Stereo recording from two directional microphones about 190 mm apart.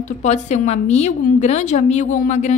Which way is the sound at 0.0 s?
40° left (ahead or behind).